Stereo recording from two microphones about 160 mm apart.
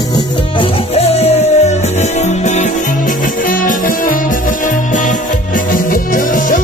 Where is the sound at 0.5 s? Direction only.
40° left (ahead or behind).